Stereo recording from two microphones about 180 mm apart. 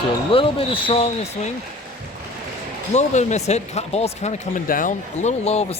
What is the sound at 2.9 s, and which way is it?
Speech, 40° left (ahead or behind).